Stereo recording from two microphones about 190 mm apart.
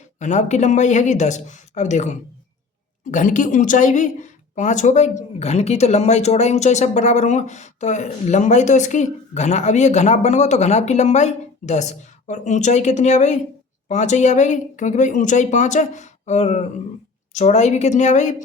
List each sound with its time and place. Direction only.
0.2 s a woman's voice: 40° left (ahead or behind)